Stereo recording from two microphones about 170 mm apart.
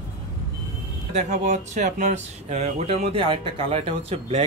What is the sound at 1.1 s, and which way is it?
Speech, 45° right (ahead or behind).